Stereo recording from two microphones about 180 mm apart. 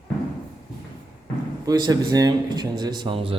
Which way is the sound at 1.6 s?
20° right (ahead or behind).